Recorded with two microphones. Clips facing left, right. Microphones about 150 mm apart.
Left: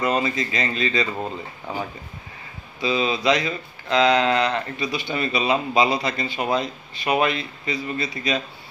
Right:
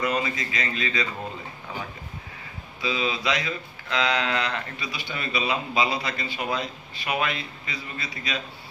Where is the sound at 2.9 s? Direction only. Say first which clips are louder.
Left 6 dB; 40° left (ahead or behind).